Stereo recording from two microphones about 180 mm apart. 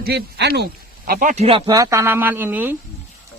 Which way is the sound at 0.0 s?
65° right (ahead or behind).